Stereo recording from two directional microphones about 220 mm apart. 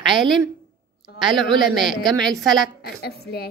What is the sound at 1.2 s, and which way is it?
A woman's voice, centre (ahead or behind).